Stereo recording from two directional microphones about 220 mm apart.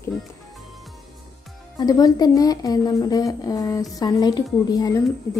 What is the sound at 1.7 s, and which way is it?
A woman's voice, 15° left (ahead or behind).